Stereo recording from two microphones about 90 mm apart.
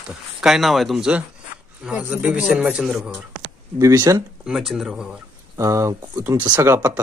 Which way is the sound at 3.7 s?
40° right (ahead or behind).